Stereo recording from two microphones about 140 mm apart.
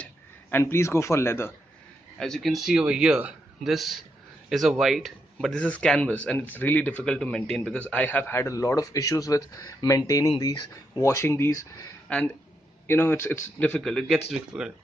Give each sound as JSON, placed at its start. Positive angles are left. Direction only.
{"t": 0.0, "sound": "speech", "side_deg": 15}
{"t": 2.1, "sound": "a man's voice", "side_deg": 5}
{"t": 12.1, "sound": "a man's voice", "side_deg": 10}